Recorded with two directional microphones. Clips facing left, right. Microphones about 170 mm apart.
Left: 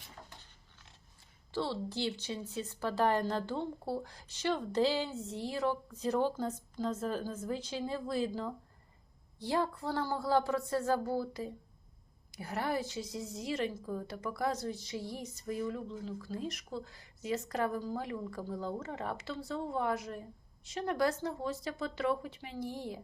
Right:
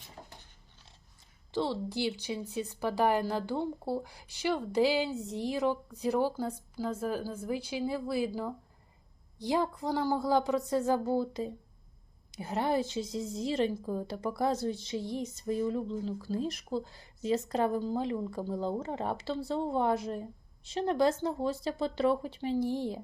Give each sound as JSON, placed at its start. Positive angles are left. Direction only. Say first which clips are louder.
{"t": 1.5, "sound": "a woman's voice", "louder": "right 4 dB", "side_deg": -15}